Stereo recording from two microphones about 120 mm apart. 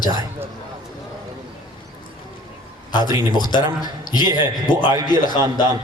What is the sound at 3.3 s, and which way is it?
Speech, 35° left (ahead or behind).